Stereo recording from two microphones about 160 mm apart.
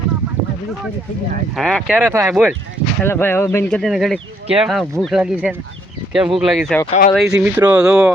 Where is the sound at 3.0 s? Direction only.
15° left (ahead or behind).